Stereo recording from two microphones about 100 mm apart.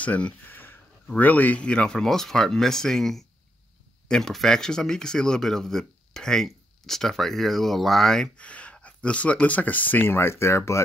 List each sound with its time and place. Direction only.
0.0 s speech: 15° left (ahead or behind)